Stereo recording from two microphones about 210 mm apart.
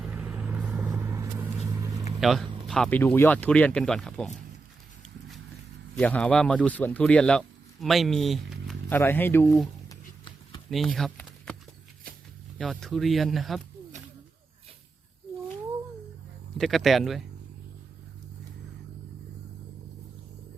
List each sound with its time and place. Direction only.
0.0 s vehicle: 5° right (ahead or behind)
2.2 s speech: centre (ahead or behind)
6.0 s speech: 5° left (ahead or behind)
9.0 s a sound: 10° left (ahead or behind)
10.7 s a sound: centre (ahead or behind)
12.5 s speech: centre (ahead or behind)
16.6 s speech: centre (ahead or behind)